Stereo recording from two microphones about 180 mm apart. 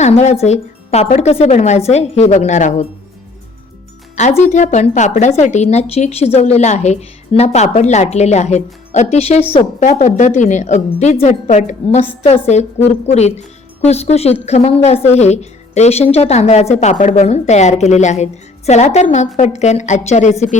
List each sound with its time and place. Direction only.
0.0 s a woman's voice: 35° left (ahead or behind)
4.1 s a woman's voice: 40° left (ahead or behind)